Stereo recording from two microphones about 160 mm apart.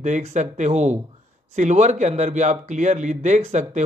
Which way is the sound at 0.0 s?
45° right (ahead or behind).